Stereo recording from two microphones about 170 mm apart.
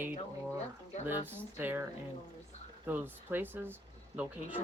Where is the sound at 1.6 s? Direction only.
10° right (ahead or behind).